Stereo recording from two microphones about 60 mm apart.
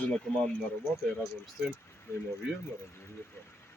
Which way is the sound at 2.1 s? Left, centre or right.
Left.